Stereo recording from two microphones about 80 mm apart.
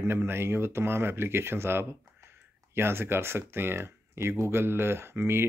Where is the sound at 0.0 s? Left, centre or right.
Right.